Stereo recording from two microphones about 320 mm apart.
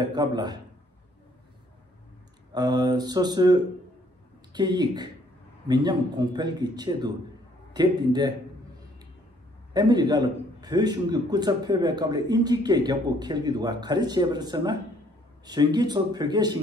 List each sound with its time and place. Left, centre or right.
0.1 s a man's voice: centre
2.5 s a man's voice: centre
9.8 s a man's voice: centre